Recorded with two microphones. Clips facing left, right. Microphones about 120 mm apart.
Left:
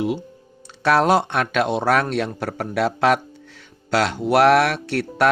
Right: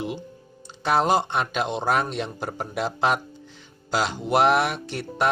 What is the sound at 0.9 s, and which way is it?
Speech, 70° left (ahead or behind).